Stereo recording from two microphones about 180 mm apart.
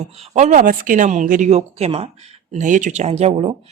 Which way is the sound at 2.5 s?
45° right (ahead or behind).